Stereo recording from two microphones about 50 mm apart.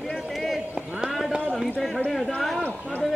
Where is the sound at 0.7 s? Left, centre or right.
Centre.